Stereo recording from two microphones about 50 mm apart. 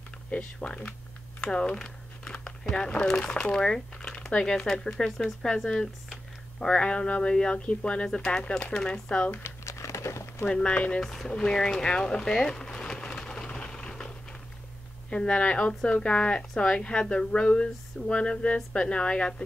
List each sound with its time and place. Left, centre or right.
0.3 s speech: left
9.7 s crumpling: left
10.5 s speech: left
11.0 s speech: centre
11.8 s a sound: centre
15.0 s speech: centre